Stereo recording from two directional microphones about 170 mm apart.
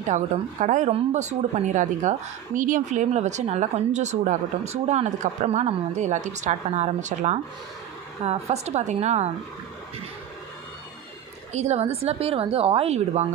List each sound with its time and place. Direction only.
0.0 s a woman's voice: 45° right (ahead or behind)
11.5 s a woman's voice: 40° right (ahead or behind)